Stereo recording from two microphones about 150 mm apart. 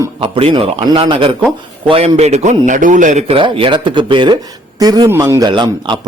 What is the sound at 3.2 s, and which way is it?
A man's voice, 35° right (ahead or behind).